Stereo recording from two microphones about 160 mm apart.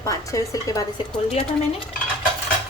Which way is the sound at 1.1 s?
45° left (ahead or behind).